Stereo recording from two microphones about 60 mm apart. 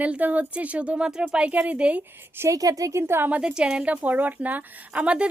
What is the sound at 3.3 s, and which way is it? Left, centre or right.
Speech, centre.